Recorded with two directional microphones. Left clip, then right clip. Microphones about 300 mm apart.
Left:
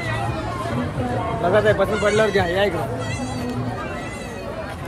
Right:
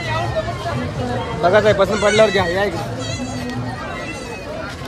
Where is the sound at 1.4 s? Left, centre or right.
Right.